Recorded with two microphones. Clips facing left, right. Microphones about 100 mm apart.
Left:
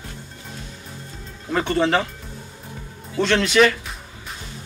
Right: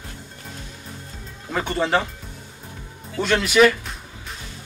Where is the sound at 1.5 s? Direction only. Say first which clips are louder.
Left 2 dB; centre (ahead or behind).